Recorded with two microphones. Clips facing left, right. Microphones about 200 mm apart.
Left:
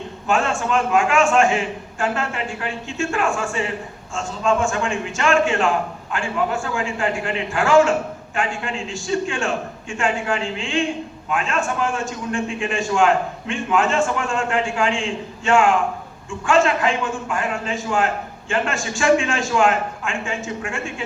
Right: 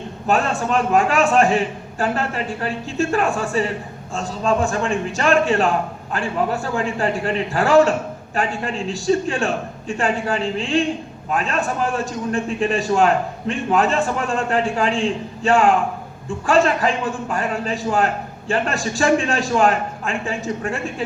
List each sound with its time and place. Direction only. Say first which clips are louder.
0.3 s a man's voice: right 1 dB; 35° right (ahead or behind)